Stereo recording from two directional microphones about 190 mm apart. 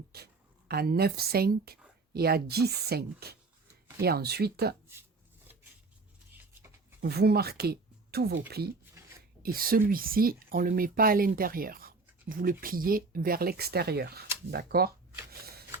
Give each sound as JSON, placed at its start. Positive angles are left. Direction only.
{"t": 0.7, "sound": "speech", "side_deg": -55}
{"t": 6.3, "sound": "a sound", "side_deg": -10}
{"t": 7.0, "sound": "speech", "side_deg": -55}
{"t": 14.5, "sound": "shuffling cards", "side_deg": -55}